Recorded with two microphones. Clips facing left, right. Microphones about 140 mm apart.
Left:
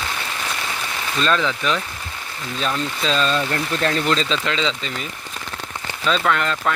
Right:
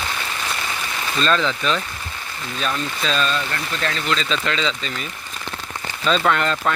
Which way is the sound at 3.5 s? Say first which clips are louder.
Left 4 dB; 35° left (ahead or behind).